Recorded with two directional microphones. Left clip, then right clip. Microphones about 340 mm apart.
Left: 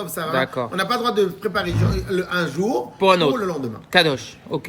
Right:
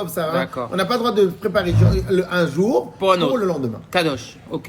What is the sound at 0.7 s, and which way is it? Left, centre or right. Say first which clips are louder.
A man's voice: right 1 dB; centre.